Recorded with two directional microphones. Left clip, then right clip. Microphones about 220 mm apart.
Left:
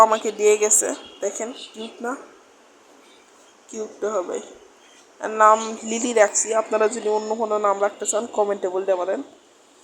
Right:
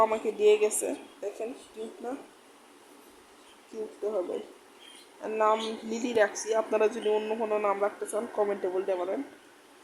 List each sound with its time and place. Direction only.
0.0 s speech: 15° left (ahead or behind)
4.0 s speech: 15° left (ahead or behind)
6.5 s speech: 10° left (ahead or behind)